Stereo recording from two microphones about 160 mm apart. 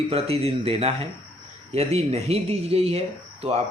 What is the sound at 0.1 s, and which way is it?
A man's voice, 40° right (ahead or behind).